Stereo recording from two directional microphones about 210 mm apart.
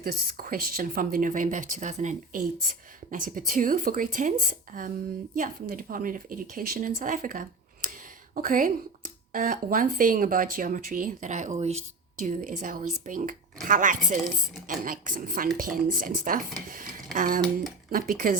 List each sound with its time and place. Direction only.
0.0 s speech: 45° right (ahead or behind)